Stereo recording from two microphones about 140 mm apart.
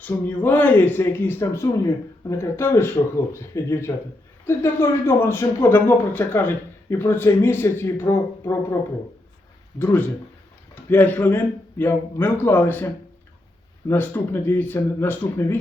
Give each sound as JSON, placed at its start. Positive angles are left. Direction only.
{"t": 0.0, "sound": "speech", "side_deg": 15}